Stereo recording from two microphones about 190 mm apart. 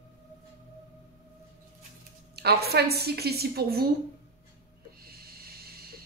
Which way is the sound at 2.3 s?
60° right (ahead or behind).